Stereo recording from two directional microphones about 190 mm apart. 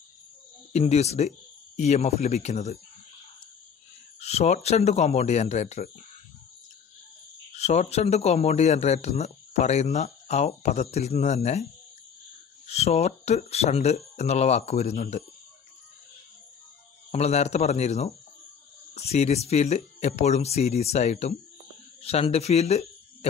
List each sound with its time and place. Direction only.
0.7 s speech: 35° left (ahead or behind)
4.2 s speech: 35° left (ahead or behind)
7.5 s speech: 35° left (ahead or behind)
12.6 s speech: 35° left (ahead or behind)
17.1 s speech: 35° left (ahead or behind)